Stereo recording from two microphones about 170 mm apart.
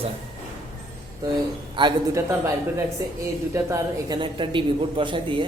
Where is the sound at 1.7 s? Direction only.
25° right (ahead or behind).